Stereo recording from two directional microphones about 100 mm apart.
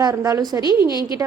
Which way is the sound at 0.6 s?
50° left (ahead or behind).